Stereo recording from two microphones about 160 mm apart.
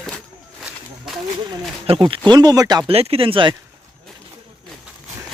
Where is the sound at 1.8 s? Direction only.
35° right (ahead or behind).